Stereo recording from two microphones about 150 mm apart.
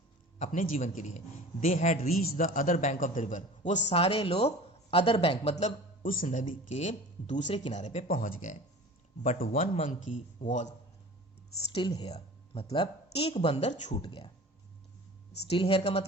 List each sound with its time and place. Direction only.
0.3 s a man's voice: 60° left (ahead or behind)
2.1 s a man's voice: 70° left (ahead or behind); by 5.7 s 45° left (ahead or behind)
6.0 s speech: 60° left (ahead or behind)
9.8 s speech: 55° left (ahead or behind)
11.7 s speech: 30° left (ahead or behind)
12.0 s a sound: 40° left (ahead or behind)
12.6 s a woman's voice: 30° left (ahead or behind)
15.4 s a woman's voice: 40° left (ahead or behind)